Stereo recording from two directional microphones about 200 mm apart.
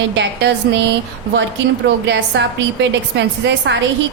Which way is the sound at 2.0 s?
60° right (ahead or behind).